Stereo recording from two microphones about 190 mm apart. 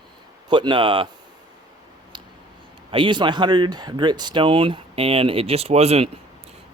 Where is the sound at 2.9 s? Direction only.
25° right (ahead or behind).